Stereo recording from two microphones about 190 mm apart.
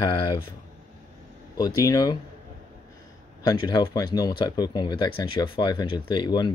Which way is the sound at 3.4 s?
20° left (ahead or behind).